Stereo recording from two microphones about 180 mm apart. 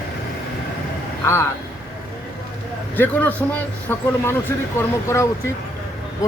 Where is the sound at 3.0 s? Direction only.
10° left (ahead or behind).